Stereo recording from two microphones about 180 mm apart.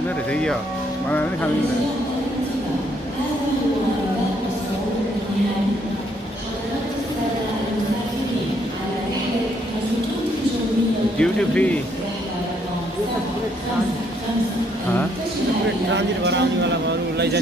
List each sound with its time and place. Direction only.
0.3 s speech: 5° left (ahead or behind)
11.1 s speech: 5° left (ahead or behind)
15.9 s a man's voice: 75° right (ahead or behind)